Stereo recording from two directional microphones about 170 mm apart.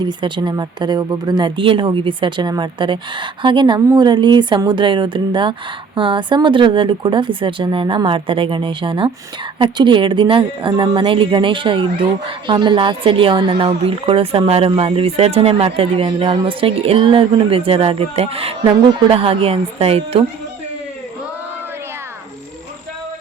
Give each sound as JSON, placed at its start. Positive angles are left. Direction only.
{"t": 0.0, "sound": "a woman's voice", "side_deg": -30}